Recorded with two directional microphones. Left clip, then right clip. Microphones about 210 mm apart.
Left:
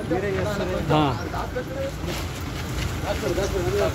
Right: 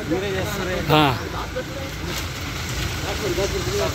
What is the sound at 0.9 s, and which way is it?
Speech, 10° right (ahead or behind).